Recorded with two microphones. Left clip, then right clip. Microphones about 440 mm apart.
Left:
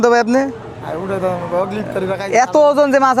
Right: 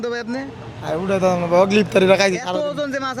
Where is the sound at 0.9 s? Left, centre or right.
Right.